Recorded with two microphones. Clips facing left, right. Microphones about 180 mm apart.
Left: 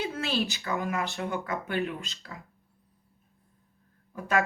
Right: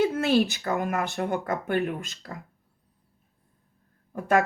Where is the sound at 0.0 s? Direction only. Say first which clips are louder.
Right 9 dB; 55° right (ahead or behind).